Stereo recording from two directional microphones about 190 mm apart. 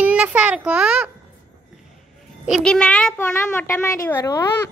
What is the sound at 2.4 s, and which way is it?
A child's voice, centre (ahead or behind).